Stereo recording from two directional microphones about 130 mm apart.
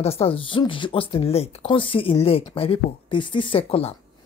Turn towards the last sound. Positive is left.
turn(degrees=45)  # may be behind; listen again after turning